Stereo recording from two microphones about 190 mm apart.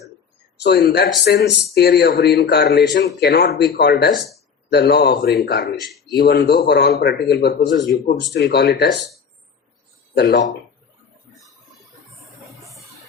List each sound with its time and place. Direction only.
0.6 s speech: 60° left (ahead or behind)
10.2 s speech: 60° left (ahead or behind)